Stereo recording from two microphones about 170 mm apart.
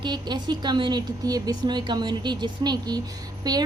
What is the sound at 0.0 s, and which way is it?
A woman's voice, 25° right (ahead or behind).